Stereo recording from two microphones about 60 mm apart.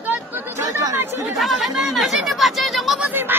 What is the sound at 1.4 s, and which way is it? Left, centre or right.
Chatter, centre.